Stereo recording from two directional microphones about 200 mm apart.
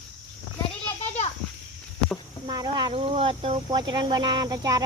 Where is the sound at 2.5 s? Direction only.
20° right (ahead or behind).